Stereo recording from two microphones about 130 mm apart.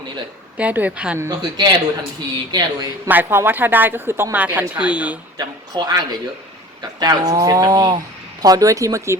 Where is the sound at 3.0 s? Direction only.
15° right (ahead or behind).